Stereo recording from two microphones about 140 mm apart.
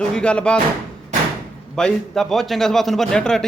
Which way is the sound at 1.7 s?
5° left (ahead or behind).